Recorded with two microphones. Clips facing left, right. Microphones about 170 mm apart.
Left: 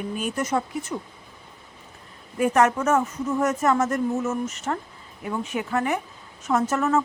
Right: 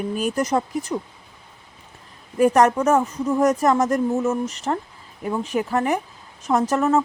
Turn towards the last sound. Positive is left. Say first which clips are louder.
# right 3 dB
turn(degrees=-35)  # may be behind; listen again after turning